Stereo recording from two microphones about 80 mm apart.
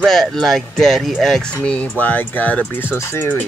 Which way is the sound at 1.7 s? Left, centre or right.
Centre.